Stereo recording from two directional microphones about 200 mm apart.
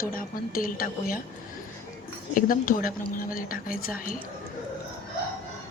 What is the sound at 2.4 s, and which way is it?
A woman's voice, 45° left (ahead or behind).